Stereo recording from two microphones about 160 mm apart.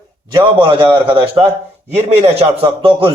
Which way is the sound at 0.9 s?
10° right (ahead or behind).